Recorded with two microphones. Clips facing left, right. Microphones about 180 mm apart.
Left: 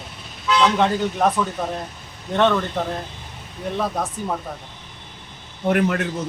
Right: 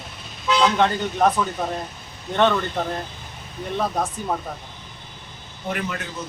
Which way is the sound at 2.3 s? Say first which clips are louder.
Left 1 dB; centre (ahead or behind).